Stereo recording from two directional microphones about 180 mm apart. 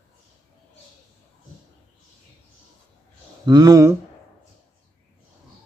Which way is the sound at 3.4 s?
20° right (ahead or behind).